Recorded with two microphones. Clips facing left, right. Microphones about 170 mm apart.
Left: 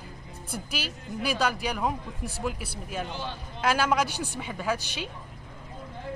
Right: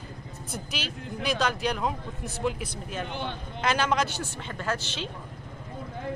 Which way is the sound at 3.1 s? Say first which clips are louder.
Right 2 dB; 60° right (ahead or behind).